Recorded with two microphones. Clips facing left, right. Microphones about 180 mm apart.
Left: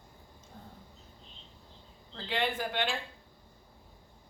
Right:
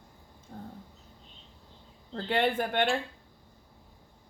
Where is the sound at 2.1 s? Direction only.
55° right (ahead or behind).